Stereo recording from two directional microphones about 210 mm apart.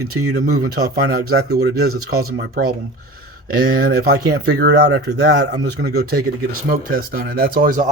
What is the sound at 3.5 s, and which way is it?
Speech, 50° right (ahead or behind).